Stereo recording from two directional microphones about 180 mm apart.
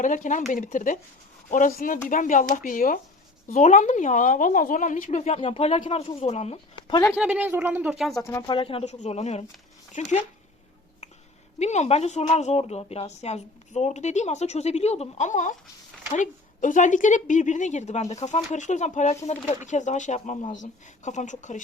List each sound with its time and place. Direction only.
0.0 s a woman's voice: 45° left (ahead or behind)
7.2 s speech: 5° right (ahead or behind)
8.2 s speech: 15° left (ahead or behind)
8.4 s a woman's voice: 30° left (ahead or behind)
11.6 s a woman's voice: 40° left (ahead or behind)